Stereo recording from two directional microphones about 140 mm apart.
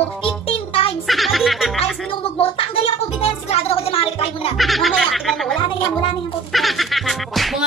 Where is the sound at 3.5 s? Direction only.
45° left (ahead or behind).